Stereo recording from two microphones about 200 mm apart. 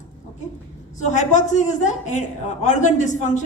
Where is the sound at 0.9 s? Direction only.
35° left (ahead or behind).